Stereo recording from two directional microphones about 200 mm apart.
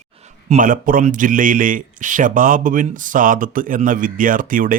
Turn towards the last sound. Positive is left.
turn(degrees=-45)  # may be behind; listen again after turning